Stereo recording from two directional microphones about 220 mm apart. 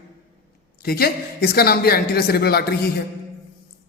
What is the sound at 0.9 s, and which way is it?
A woman's voice, 45° left (ahead or behind).